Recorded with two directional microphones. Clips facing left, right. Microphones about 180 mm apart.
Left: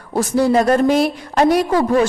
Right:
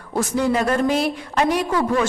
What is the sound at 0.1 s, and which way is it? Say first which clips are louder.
Speech: left 5 dB; 35° left (ahead or behind).